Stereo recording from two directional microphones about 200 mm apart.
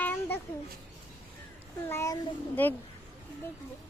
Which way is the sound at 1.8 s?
15° left (ahead or behind).